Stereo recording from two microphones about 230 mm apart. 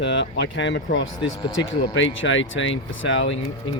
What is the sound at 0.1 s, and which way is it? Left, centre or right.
Speech, left.